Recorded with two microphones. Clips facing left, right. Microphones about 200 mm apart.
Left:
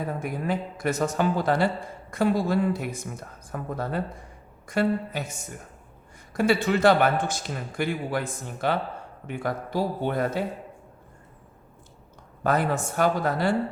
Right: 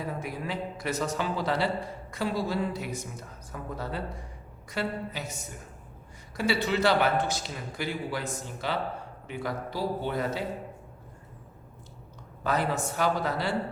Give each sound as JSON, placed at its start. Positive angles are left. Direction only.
{"t": 0.0, "sound": "speech", "side_deg": 50}
{"t": 6.3, "sound": "speech", "side_deg": 50}
{"t": 12.4, "sound": "speech", "side_deg": 50}